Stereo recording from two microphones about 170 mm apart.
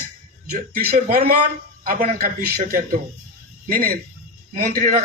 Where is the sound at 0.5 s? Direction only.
60° right (ahead or behind).